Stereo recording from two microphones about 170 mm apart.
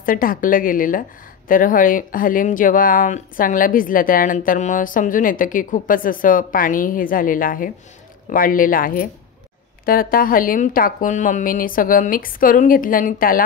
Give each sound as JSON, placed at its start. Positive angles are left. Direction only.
{"t": 0.0, "sound": "a woman's voice", "side_deg": 55}